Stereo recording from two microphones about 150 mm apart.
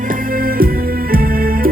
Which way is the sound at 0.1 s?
70° right (ahead or behind).